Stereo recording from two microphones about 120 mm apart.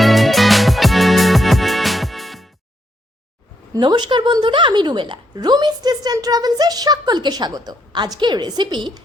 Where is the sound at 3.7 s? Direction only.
35° right (ahead or behind).